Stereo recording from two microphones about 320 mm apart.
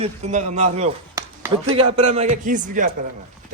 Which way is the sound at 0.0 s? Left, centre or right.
Right.